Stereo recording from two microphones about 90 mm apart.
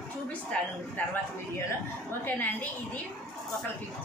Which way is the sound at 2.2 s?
20° left (ahead or behind).